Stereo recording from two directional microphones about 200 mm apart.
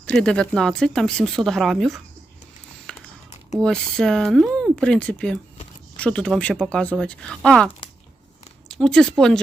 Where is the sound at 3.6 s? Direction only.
5° left (ahead or behind).